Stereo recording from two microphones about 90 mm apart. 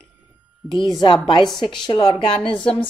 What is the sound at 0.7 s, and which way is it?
Speech, 60° left (ahead or behind).